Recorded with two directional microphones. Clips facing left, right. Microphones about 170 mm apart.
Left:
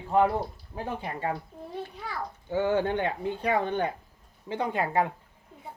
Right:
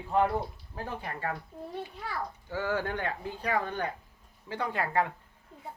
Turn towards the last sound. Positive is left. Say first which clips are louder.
# left 3 dB
turn(degrees=20)  # may be behind; listen again after turning